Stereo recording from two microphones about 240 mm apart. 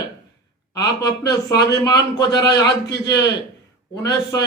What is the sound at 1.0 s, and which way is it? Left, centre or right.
A man's voice, centre.